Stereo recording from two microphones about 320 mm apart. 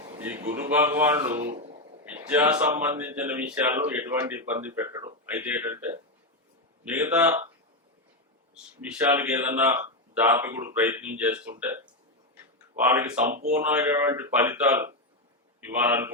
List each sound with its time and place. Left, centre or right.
0.0 s speech: centre
1.4 s speech: centre
2.0 s speech: centre
8.8 s speech: centre
12.9 s speech: centre